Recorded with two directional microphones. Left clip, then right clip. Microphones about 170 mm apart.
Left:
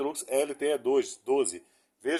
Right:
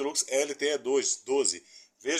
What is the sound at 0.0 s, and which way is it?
A man's voice, 45° left (ahead or behind).